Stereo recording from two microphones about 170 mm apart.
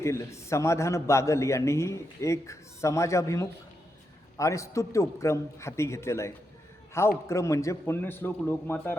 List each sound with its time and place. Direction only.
0.0 s a man's voice: 15° left (ahead or behind)